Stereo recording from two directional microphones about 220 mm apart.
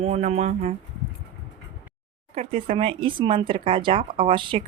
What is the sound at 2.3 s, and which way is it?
Speech, 25° right (ahead or behind).